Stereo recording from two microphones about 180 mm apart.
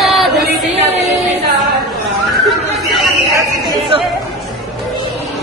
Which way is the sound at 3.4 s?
25° right (ahead or behind).